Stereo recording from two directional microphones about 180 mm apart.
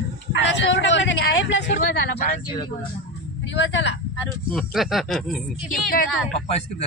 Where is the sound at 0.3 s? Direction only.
85° left.